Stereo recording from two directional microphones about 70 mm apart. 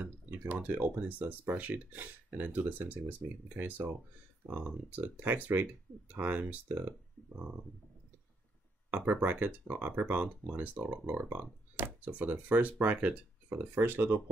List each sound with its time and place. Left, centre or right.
0.0 s speech: right
8.9 s speech: right
13.5 s speech: right